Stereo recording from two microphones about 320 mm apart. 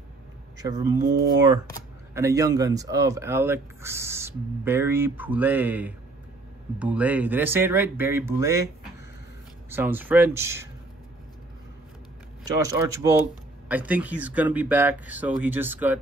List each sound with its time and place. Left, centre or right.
0.6 s speech: centre
9.7 s speech: centre
12.4 s speech: centre